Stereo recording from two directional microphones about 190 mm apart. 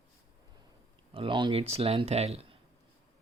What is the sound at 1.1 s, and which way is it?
Speech, 25° right (ahead or behind).